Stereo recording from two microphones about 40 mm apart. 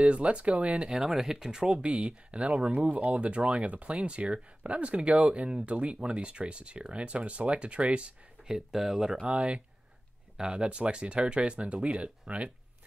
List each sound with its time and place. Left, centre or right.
0.0 s speech: right
0.8 s speech: centre
1.8 s speech: right
8.5 s speech: centre
10.3 s speech: centre
10.7 s speech: right